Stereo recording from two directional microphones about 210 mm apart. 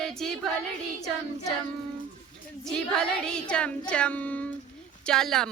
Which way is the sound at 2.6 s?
5° left (ahead or behind).